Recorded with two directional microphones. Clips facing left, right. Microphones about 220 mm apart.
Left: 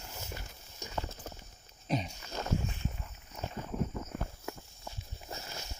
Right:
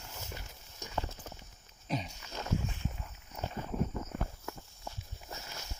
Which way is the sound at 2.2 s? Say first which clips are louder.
Left 3 dB; 40° left (ahead or behind).